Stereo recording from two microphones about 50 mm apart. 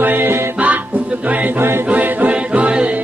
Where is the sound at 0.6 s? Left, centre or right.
Right.